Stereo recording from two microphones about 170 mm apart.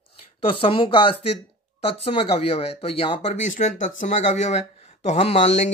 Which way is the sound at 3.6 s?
45° left (ahead or behind).